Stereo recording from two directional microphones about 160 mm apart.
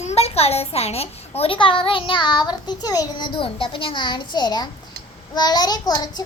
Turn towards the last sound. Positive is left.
turn(degrees=25)  # may be behind; listen again after turning